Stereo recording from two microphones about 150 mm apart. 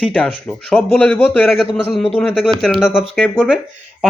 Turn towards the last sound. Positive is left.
turn(degrees=0)  # may be behind; listen again after turning